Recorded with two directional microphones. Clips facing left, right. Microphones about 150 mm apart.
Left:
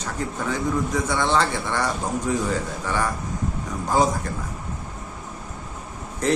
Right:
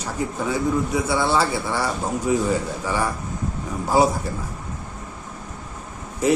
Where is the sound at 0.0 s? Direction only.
10° right (ahead or behind).